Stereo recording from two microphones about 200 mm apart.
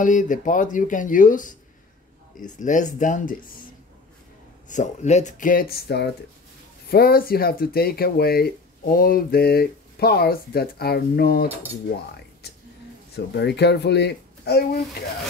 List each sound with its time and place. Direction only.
0.0 s speech: 40° left (ahead or behind)
4.6 s speech: 35° left (ahead or behind)
12.4 s whispering: 55° left (ahead or behind)
13.1 s speech: 55° left (ahead or behind)